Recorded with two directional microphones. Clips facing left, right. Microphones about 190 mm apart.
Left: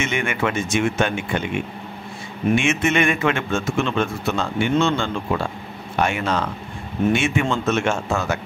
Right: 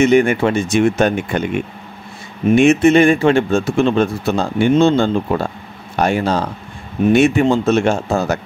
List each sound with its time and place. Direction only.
0.0 s a man's voice: 35° right (ahead or behind)
2.5 s a man's voice: 35° right (ahead or behind)